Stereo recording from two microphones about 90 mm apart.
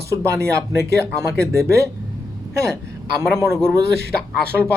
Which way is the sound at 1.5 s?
35° right (ahead or behind).